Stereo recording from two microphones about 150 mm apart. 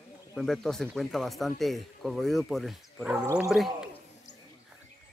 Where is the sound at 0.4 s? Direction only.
5° left (ahead or behind).